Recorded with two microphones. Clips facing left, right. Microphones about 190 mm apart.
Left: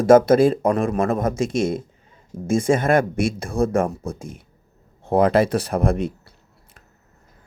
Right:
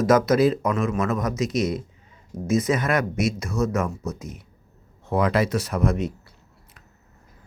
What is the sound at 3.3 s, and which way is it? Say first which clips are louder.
Speech: left 4 dB; 30° left (ahead or behind).